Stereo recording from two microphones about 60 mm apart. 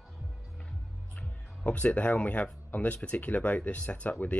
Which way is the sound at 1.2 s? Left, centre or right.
Left.